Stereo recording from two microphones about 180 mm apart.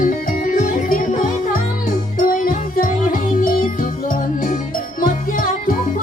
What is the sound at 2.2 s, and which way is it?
Music, 50° left (ahead or behind).